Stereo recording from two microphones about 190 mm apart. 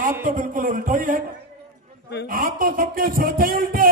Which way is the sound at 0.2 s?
45° right (ahead or behind).